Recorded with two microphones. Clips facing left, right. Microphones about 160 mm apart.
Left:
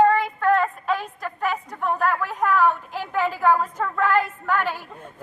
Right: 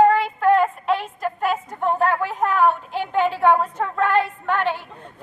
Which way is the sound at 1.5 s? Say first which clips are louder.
Right 4 dB; 30° right (ahead or behind).